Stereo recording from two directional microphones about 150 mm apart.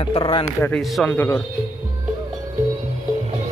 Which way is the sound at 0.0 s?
35° left (ahead or behind).